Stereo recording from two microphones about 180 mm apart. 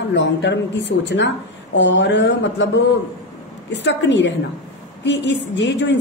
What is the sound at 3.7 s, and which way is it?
A woman's voice, 80° left.